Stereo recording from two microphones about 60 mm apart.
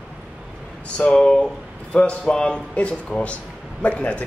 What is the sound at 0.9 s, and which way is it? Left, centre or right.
Speech, centre.